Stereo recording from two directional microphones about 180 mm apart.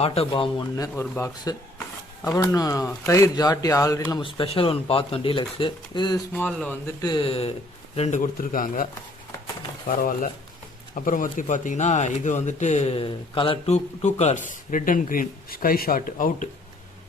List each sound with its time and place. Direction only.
0.0 s speech: 35° left (ahead or behind)
0.9 s speech: 15° left (ahead or behind)
6.3 s speech: 10° left (ahead or behind)
7.0 s speech: 25° left (ahead or behind); by 16.5 s 50° left (ahead or behind)